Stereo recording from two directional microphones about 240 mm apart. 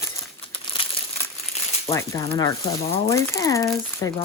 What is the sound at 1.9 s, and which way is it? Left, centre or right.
Speech, centre.